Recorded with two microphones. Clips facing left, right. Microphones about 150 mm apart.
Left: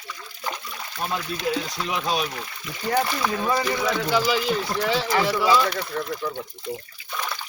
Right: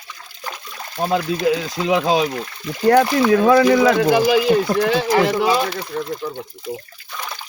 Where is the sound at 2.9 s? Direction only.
70° right (ahead or behind); by 4.0 s 90° right.